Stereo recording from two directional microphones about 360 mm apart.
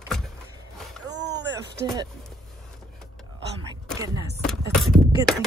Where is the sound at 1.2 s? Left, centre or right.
Right.